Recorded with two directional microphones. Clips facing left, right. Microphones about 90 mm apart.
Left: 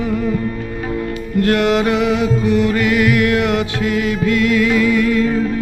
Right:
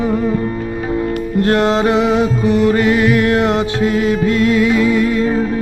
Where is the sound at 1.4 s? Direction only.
30° right (ahead or behind).